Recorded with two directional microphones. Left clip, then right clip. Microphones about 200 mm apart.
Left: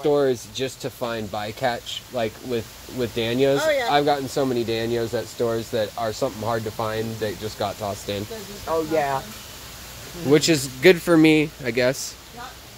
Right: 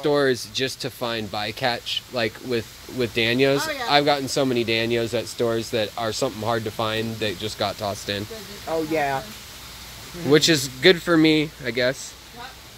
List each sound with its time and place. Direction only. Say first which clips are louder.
0.0 s speech: even; 15° right (ahead or behind)
8.9 s speech: even; 50° right (ahead or behind)
10.3 s a man's voice: right 1 dB; centre (ahead or behind); by 12.0 s 15° left (ahead or behind)